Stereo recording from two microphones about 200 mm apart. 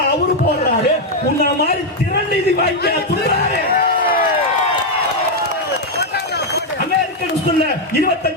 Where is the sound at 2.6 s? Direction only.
55° left (ahead or behind).